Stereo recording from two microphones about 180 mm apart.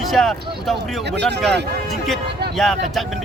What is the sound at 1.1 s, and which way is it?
Speech, 70° right (ahead or behind).